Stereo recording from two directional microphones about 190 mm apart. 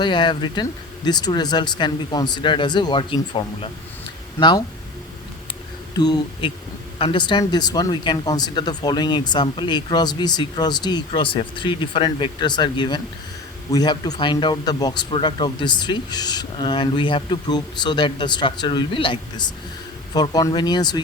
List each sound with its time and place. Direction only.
0.0 s speech: 25° left (ahead or behind)
6.0 s speech: 20° left (ahead or behind)